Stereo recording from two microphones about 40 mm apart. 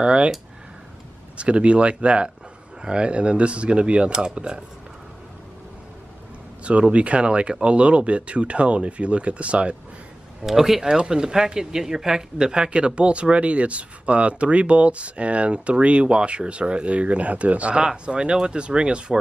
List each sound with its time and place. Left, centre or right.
0.0 s speech: right
1.4 s speech: right
6.6 s speech: right
10.4 s speech: centre; by 19.1 s right